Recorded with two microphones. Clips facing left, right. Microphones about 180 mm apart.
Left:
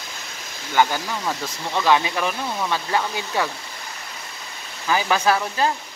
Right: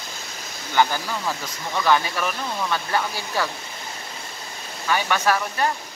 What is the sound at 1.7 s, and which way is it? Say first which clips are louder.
Speech: left 1 dB; 20° left (ahead or behind).